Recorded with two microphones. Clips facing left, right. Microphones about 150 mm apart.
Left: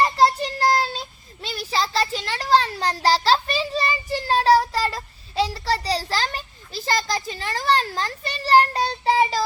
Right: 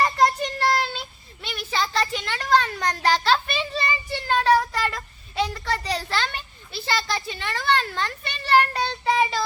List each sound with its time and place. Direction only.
0.0 s child singing: 30° left (ahead or behind)